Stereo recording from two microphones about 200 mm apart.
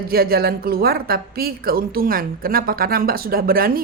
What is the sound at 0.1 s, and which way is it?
A woman's voice, 50° right (ahead or behind).